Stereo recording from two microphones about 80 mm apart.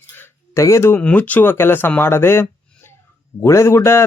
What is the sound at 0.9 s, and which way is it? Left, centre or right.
A man's voice, centre.